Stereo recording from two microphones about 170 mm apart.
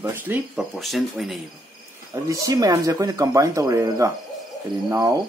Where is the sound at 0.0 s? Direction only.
10° right (ahead or behind).